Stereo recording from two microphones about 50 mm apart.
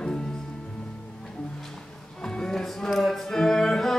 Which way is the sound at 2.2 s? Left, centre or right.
Centre.